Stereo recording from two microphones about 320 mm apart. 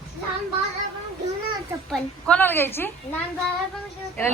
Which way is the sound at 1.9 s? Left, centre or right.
Centre.